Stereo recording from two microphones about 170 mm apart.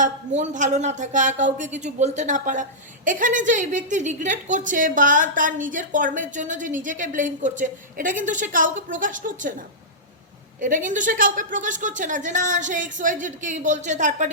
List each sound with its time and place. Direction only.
0.0 s speech: 45° right (ahead or behind)
10.6 s speech: 50° right (ahead or behind)